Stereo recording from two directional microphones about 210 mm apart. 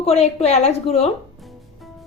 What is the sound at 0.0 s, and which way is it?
A woman's voice, 30° left (ahead or behind).